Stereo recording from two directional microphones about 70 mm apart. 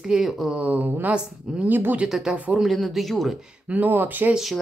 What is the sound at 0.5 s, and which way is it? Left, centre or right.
Speech, right.